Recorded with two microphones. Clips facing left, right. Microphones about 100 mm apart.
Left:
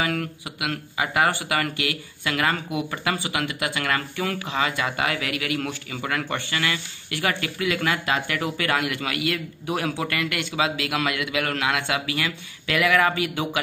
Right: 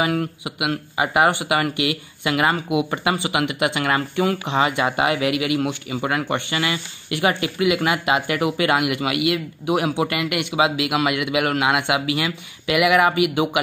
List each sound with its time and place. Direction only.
0.0 s speech: 20° right (ahead or behind)